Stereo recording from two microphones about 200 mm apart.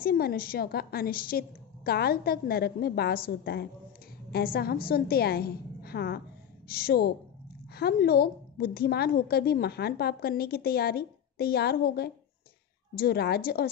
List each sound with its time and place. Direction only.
0.0 s a woman's voice: 50° left (ahead or behind)